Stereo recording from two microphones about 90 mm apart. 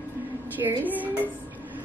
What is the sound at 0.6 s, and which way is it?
Speech, 20° right (ahead or behind).